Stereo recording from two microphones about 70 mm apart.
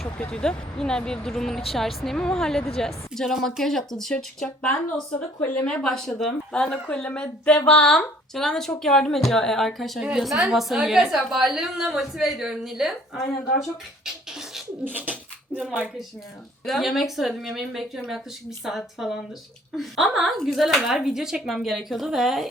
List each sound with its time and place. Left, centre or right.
0.3 s a woman's voice: centre
14.0 s beatboxing: centre
14.8 s pigeon: right
16.6 s a woman's voice: centre